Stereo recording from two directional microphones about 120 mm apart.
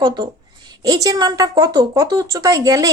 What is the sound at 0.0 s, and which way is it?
Speech, 35° right (ahead or behind).